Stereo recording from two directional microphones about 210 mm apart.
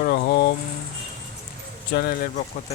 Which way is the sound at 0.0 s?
45° left (ahead or behind).